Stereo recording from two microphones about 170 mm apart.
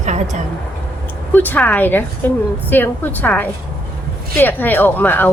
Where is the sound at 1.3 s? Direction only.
10° left (ahead or behind).